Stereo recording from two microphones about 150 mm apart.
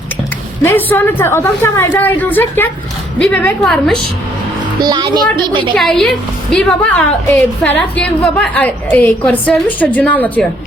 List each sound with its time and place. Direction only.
0.6 s a woman's voice: 15° left (ahead or behind)
4.8 s a child's voice: 30° right (ahead or behind)
5.7 s a woman's voice: 5° left (ahead or behind)